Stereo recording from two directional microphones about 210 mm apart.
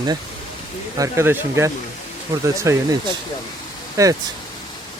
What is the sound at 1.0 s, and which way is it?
Speech, 10° right (ahead or behind).